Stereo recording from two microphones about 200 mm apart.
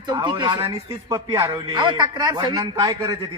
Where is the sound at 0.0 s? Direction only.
20° right (ahead or behind).